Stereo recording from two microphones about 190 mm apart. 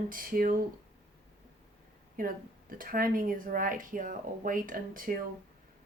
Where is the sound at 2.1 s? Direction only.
50° right (ahead or behind).